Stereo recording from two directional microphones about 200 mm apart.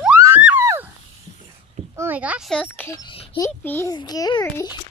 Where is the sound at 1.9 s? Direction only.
10° right (ahead or behind).